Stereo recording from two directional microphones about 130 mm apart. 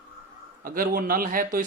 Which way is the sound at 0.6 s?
90° right.